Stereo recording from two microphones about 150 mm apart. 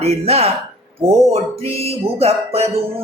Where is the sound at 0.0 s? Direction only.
45° right (ahead or behind).